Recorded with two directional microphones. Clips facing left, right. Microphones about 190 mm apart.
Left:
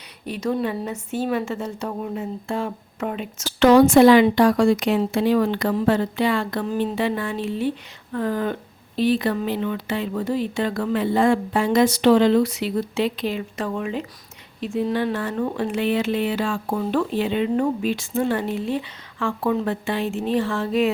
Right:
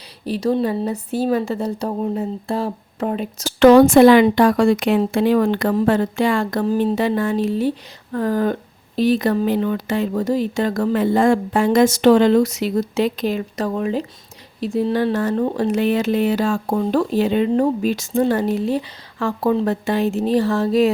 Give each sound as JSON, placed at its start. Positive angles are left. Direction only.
{"t": 0.3, "sound": "speech", "side_deg": -35}